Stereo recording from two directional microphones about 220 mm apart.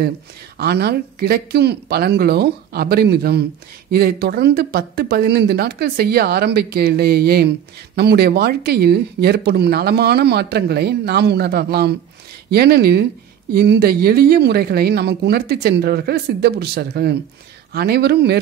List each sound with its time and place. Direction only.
0.6 s speech: 45° right (ahead or behind)